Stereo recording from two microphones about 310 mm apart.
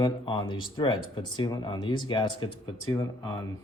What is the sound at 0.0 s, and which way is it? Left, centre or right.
Speech, centre.